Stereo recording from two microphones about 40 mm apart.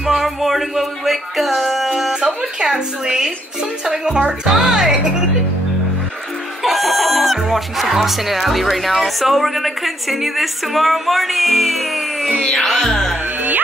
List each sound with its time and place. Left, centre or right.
0.2 s speech: centre
1.9 s music: centre
2.2 s a woman's voice: centre
6.6 s chicken: centre
7.9 s a woman's voice: centre